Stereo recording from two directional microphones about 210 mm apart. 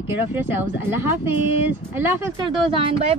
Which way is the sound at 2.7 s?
25° right (ahead or behind).